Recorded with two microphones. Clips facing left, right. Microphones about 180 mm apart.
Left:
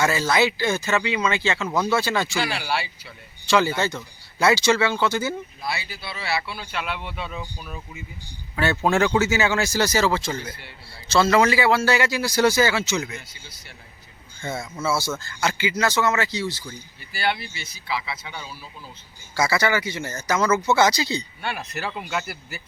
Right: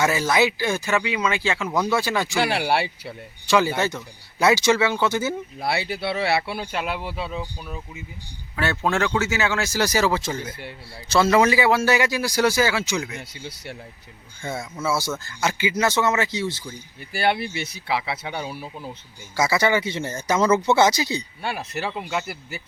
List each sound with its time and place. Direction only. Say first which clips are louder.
0.0 s speech: right 1 dB; 15° right (ahead or behind)
2.4 s speech: right 5 dB; 65° right (ahead or behind)
3.5 s speech: right 1 dB; 15° right (ahead or behind)
5.6 s speech: right 9 dB; 70° right (ahead or behind); by 7.8 s 30° right (ahead or behind)
8.5 s speech: left 2 dB; 5° left (ahead or behind)
9.8 s speech: right 2 dB; 15° right (ahead or behind)
14.8 s speech: even; 15° right (ahead or behind)
17.1 s speech: right 4 dB; 55° right (ahead or behind)
19.4 s speech: right 1 dB; 20° right (ahead or behind)